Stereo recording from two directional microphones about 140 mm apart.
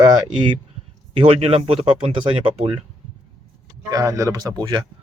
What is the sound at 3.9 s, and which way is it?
Speech, 25° right (ahead or behind).